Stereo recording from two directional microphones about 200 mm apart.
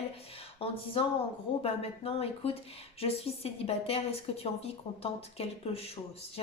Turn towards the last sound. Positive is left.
turn(degrees=30)  # may be behind; listen again after turning